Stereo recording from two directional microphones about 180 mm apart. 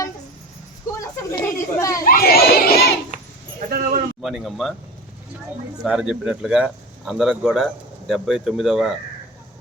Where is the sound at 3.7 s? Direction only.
50° right (ahead or behind).